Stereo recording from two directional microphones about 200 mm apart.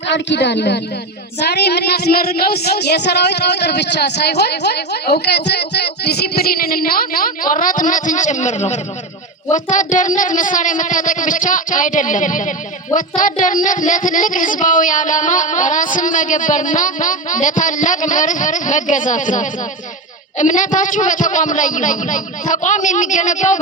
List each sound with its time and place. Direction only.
0.1 s a woman's voice: 60° left (ahead or behind)
1.4 s child singing: 55° left (ahead or behind); by 8.8 s 35° left (ahead or behind)
9.5 s speech: 40° left (ahead or behind)